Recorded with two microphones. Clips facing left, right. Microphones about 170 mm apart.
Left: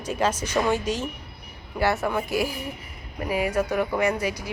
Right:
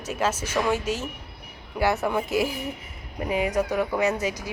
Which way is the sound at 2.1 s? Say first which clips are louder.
Right 1 dB; 20° right (ahead or behind).